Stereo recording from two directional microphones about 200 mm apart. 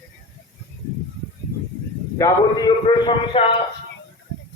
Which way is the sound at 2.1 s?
20° left (ahead or behind).